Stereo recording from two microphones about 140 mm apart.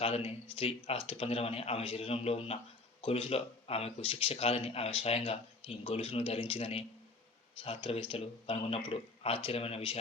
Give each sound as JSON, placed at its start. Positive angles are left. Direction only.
{"t": 0.0, "sound": "speech", "side_deg": 45}